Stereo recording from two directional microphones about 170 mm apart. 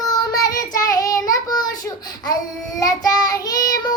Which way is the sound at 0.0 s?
20° left (ahead or behind).